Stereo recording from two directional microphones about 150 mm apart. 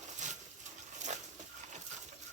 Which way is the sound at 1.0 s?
55° right (ahead or behind).